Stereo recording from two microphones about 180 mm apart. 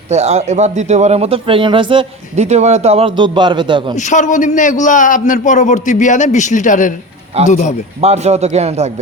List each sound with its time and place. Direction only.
0.1 s speech: 40° right (ahead or behind)
3.9 s a man's voice: 45° left (ahead or behind)
8.0 s speech: 35° right (ahead or behind)